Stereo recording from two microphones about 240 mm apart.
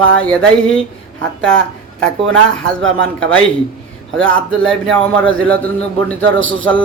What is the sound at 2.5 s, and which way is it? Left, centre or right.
Speech, centre.